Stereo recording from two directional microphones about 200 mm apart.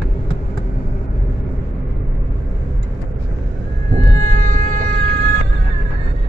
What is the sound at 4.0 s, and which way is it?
Music, 45° right (ahead or behind).